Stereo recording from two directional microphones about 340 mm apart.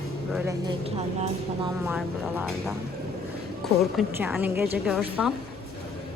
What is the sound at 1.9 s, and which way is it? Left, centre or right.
A woman's voice, centre.